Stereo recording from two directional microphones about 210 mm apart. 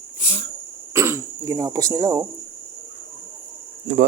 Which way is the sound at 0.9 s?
15° right (ahead or behind).